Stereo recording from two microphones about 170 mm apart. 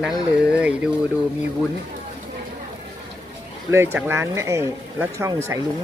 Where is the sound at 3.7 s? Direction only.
15° right (ahead or behind).